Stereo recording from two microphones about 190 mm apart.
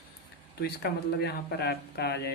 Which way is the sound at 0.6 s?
55° left (ahead or behind).